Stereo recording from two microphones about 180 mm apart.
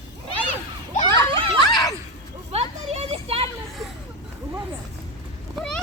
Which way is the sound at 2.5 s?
35° right (ahead or behind).